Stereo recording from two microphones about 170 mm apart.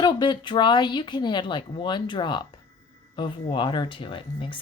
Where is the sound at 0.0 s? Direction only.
25° left (ahead or behind).